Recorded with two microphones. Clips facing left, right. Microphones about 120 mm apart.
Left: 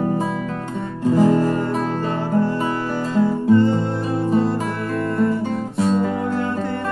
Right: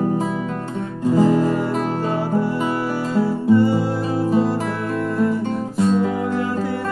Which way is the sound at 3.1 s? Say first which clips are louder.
Left 1 dB; 10° right (ahead or behind).